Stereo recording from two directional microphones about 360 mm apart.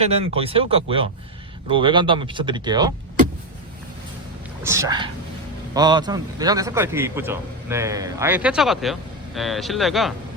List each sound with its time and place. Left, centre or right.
0.0 s speech: centre
4.6 s a man's voice: centre